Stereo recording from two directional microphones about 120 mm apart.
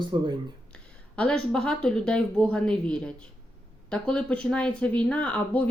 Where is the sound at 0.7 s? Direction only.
10° left (ahead or behind).